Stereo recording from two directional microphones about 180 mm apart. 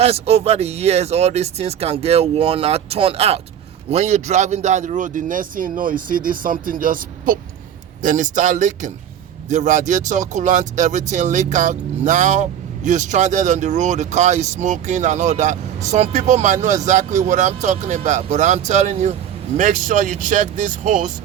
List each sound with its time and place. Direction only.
0.0 s speech: 35° right (ahead or behind)